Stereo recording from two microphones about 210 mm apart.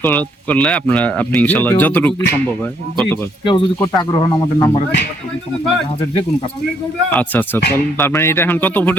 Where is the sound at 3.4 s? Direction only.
25° left (ahead or behind).